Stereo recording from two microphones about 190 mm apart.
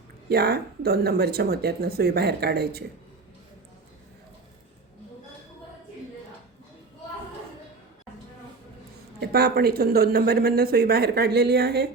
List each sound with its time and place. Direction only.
0.3 s speech: 55° right (ahead or behind)
9.2 s speech: 55° right (ahead or behind)